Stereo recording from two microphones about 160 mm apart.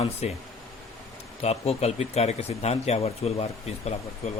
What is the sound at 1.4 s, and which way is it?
Speech, 40° left (ahead or behind).